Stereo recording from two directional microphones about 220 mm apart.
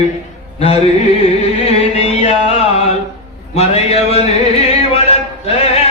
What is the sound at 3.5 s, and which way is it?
Music, 30° left (ahead or behind).